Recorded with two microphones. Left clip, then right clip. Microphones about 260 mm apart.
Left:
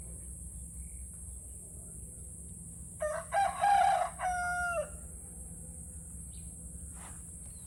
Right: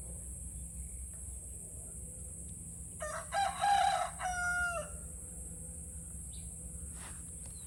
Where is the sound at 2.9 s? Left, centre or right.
Left.